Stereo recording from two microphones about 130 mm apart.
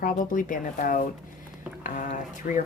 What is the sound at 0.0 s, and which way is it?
Speech, 90° left.